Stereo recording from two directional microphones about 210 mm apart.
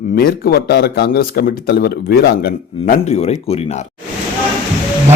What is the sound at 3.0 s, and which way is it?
Speech, 30° left (ahead or behind).